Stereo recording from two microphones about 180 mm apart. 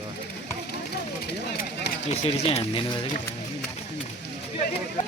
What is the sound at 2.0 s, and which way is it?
Speech, 35° left (ahead or behind).